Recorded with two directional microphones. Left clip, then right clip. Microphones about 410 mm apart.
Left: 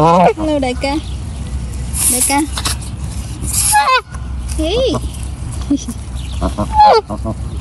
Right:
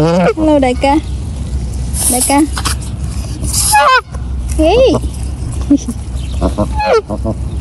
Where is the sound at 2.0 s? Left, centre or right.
Centre.